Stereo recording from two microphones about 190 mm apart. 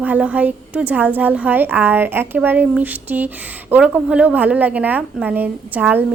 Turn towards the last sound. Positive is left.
turn(degrees=-10)  # may be behind; listen again after turning